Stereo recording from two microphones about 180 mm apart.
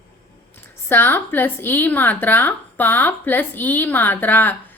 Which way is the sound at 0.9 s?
10° left (ahead or behind).